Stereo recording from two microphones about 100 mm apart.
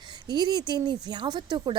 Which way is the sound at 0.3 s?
45° right (ahead or behind).